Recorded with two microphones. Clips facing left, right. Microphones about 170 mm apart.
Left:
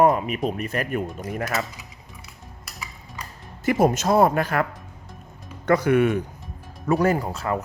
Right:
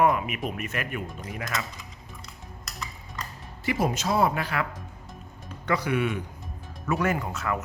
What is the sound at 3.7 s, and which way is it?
Speech, 45° left (ahead or behind).